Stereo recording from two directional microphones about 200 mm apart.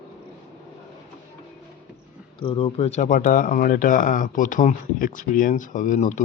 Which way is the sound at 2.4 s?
25° left (ahead or behind).